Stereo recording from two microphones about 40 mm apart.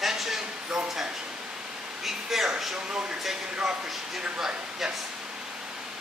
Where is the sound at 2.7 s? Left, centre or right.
Right.